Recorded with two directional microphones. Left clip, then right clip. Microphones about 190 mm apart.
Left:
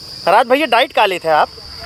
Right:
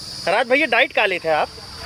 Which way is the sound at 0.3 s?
25° left (ahead or behind).